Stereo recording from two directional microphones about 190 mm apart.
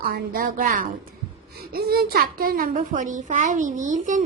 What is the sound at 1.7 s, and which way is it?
A child's voice, 55° right (ahead or behind).